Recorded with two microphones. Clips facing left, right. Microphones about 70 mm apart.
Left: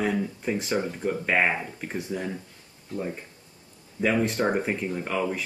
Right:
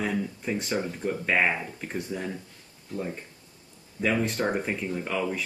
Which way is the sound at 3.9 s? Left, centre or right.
Centre.